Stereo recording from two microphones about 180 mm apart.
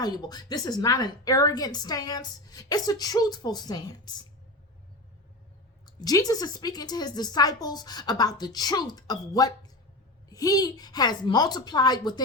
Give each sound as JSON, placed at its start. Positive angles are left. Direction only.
{"t": 0.0, "sound": "a woman's voice", "side_deg": 20}
{"t": 5.8, "sound": "a woman's voice", "side_deg": 20}